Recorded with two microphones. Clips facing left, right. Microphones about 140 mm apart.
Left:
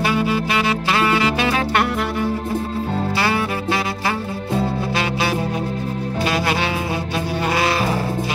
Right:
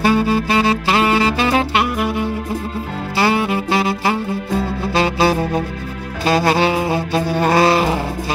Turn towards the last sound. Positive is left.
turn(degrees=-30)  # may be behind; listen again after turning